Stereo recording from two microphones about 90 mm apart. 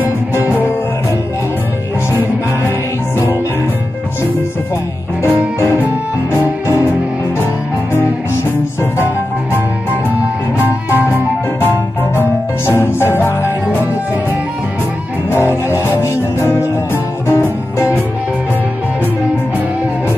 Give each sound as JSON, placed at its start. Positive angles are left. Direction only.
{"t": 6.3, "sound": "music", "side_deg": -20}
{"t": 10.6, "sound": "music", "side_deg": -20}
{"t": 12.2, "sound": "music", "side_deg": 25}
{"t": 15.3, "sound": "music", "side_deg": 30}